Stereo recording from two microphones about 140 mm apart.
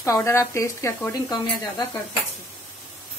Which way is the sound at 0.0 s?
20° left (ahead or behind).